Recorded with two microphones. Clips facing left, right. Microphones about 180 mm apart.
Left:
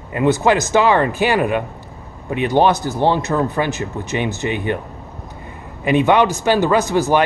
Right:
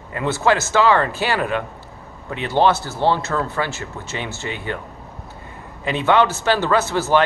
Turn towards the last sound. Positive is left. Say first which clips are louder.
# left 3 dB
turn(degrees=15)  # may be behind; listen again after turning